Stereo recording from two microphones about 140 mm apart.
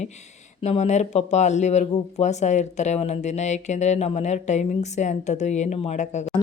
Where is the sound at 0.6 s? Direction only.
55° left (ahead or behind).